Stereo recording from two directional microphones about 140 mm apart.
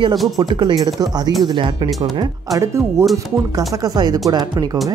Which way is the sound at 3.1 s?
25° right (ahead or behind).